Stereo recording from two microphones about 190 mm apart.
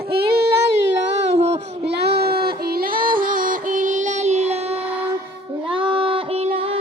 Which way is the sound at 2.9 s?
50° right (ahead or behind).